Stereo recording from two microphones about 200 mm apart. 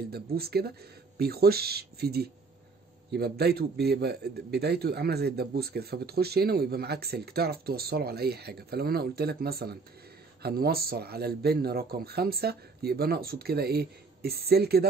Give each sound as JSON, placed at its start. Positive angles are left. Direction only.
{"t": 0.1, "sound": "a man's voice", "side_deg": -50}